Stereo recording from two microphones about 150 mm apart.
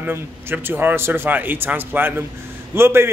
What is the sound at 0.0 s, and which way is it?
Speech, 15° right (ahead or behind).